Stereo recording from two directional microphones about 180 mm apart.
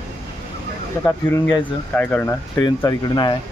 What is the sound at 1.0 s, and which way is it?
Speech, 10° left (ahead or behind).